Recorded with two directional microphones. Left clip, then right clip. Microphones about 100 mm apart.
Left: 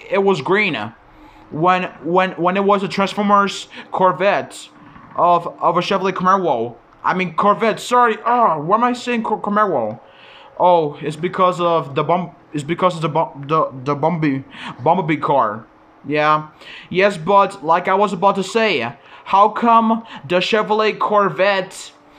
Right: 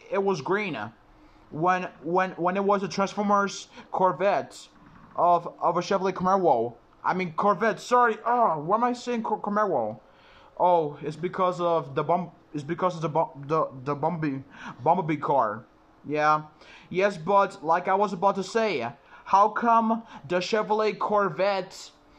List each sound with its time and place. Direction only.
0.1 s speech: 20° right (ahead or behind); by 6.4 s 45° right (ahead or behind)
6.4 s speech: 55° right (ahead or behind)
7.1 s speech: 35° right (ahead or behind)
7.5 s speech: 20° right (ahead or behind)
13.8 s a man's voice: centre (ahead or behind)
14.6 s speech: 20° right (ahead or behind)
19.3 s speech: 15° right (ahead or behind)
20.2 s speech: 30° right (ahead or behind)